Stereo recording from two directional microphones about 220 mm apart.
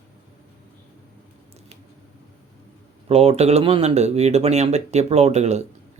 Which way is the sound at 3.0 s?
30° right (ahead or behind).